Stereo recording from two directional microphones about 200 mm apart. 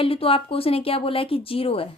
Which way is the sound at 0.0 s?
30° left (ahead or behind).